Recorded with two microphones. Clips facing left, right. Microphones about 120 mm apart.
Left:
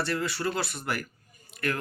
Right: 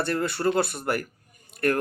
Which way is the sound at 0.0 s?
50° right (ahead or behind).